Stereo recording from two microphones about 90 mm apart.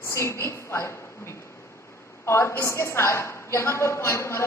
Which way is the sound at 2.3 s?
30° left (ahead or behind).